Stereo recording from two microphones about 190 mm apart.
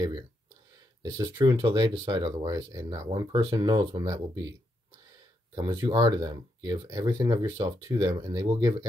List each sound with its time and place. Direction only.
1.1 s speech: 20° right (ahead or behind)
5.5 s speech: 20° right (ahead or behind)